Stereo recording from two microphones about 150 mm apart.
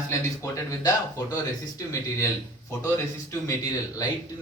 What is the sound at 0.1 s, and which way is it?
Speech, 20° left (ahead or behind).